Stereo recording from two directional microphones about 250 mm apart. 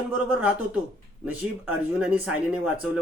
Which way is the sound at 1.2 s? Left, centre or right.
Centre.